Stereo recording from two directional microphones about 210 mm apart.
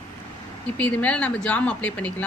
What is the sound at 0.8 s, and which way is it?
Speech, 5° left (ahead or behind).